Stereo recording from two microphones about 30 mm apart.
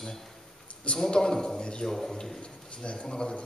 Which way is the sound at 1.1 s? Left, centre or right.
Left.